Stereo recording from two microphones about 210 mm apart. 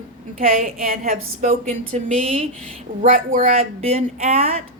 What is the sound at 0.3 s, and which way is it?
Speech, 40° right (ahead or behind).